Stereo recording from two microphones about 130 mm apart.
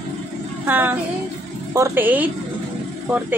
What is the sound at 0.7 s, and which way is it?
Speech, 15° right (ahead or behind).